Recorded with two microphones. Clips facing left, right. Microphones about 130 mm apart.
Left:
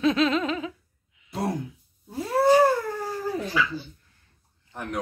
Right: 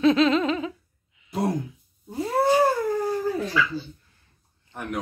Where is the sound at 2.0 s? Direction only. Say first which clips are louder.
Right 1 dB; 25° right (ahead or behind).